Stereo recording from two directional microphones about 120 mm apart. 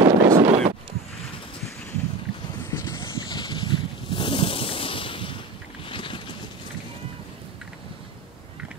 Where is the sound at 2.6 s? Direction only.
25° left (ahead or behind).